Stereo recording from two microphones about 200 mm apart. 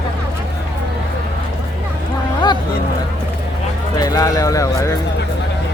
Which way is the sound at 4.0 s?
15° left (ahead or behind).